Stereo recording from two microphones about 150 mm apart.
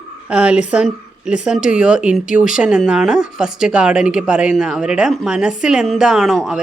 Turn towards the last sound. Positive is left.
turn(degrees=0)  # may be behind; listen again after turning